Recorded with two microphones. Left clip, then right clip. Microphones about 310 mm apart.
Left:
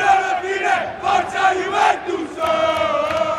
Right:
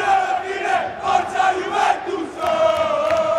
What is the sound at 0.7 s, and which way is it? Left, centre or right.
Crowd, centre.